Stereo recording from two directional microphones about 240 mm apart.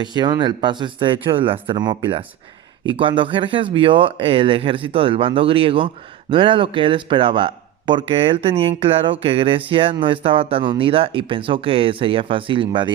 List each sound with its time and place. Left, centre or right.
0.0 s speech: centre